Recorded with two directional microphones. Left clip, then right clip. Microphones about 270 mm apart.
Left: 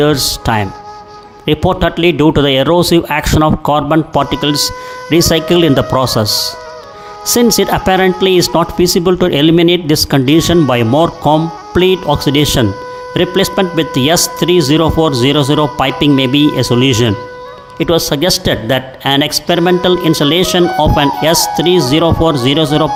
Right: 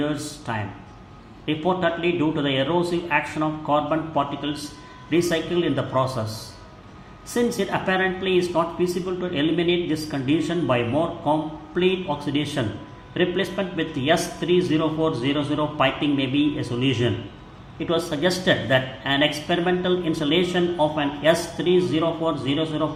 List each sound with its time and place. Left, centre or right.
0.0 s speech: left
7.3 s speech: left